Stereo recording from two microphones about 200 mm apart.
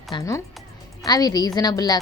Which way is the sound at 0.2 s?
15° left (ahead or behind).